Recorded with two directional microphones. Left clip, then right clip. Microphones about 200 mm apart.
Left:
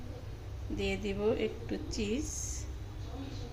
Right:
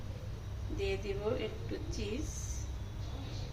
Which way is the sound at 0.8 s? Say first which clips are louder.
Left 2 dB; 45° left (ahead or behind).